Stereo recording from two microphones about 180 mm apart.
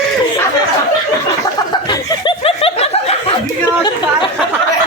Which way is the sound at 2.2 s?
30° left (ahead or behind).